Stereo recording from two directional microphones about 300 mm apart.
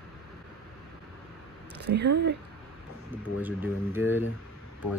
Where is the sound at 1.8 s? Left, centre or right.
Right.